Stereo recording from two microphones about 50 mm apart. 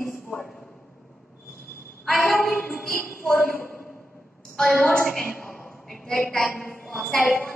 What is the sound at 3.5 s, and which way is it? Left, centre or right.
Speech, left.